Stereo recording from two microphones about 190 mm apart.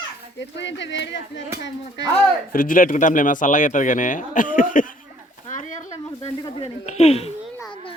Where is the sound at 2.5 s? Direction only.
45° left (ahead or behind).